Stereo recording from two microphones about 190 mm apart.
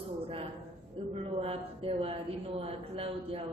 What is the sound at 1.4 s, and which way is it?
A man's voice, 30° right (ahead or behind).